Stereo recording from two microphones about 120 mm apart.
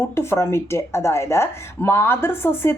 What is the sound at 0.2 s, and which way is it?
A woman's voice, 20° left (ahead or behind).